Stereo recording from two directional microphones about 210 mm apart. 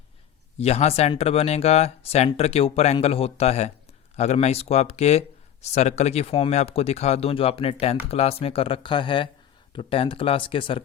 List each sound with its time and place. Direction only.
0.6 s speech: 30° left (ahead or behind)